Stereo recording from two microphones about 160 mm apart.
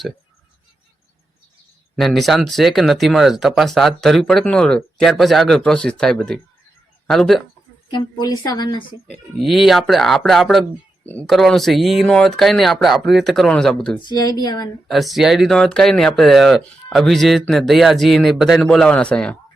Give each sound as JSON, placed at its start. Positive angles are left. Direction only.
{"t": 2.0, "sound": "speech", "side_deg": 0}
{"t": 7.9, "sound": "a woman's voice", "side_deg": 25}
{"t": 9.4, "sound": "speech", "side_deg": 0}
{"t": 14.1, "sound": "a woman's voice", "side_deg": 25}
{"t": 14.8, "sound": "speech", "side_deg": 0}